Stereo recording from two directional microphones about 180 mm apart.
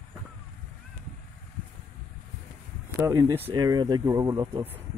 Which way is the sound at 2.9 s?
20° right (ahead or behind).